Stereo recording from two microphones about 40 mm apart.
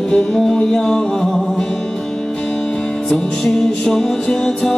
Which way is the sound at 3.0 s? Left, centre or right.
Centre.